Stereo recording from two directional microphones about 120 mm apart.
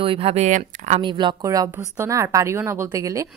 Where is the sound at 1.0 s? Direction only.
40° right (ahead or behind).